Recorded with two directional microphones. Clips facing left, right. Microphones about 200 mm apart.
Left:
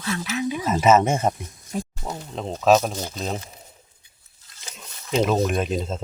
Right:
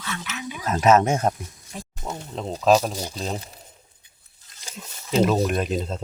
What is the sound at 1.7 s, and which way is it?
Speech, 45° left (ahead or behind).